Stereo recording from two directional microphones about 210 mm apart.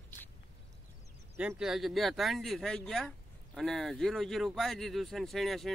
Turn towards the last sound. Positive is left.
turn(degrees=0)  # may be behind; listen again after turning